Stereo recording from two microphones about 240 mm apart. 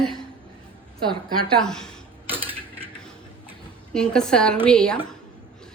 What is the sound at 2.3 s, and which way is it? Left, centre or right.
Mechanisms, centre.